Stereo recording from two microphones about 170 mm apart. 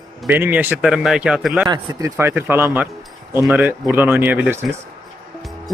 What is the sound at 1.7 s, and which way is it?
Speech, 15° right (ahead or behind).